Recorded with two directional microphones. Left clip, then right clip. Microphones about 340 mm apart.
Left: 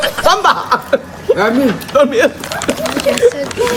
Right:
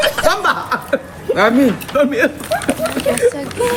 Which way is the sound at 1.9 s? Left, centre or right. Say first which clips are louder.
Left 7 dB; centre.